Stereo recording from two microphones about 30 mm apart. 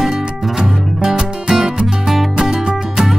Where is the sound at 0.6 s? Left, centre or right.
Right.